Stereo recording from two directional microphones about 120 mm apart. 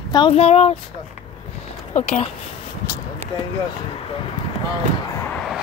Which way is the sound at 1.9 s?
65° left (ahead or behind).